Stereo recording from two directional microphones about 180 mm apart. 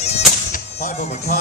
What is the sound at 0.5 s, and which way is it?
Music, 45° left (ahead or behind).